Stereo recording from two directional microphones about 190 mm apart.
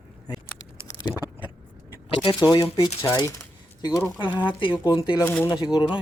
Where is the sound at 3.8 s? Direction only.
15° left (ahead or behind).